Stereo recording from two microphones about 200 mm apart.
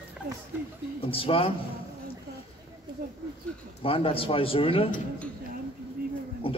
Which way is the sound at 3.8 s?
25° left (ahead or behind).